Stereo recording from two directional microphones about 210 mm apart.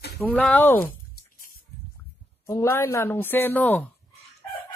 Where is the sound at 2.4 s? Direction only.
15° left (ahead or behind).